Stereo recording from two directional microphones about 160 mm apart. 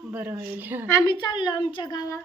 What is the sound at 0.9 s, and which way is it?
A woman's voice, 25° left (ahead or behind).